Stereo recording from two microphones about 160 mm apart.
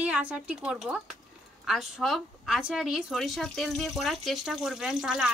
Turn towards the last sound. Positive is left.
turn(degrees=-5)  # may be behind; listen again after turning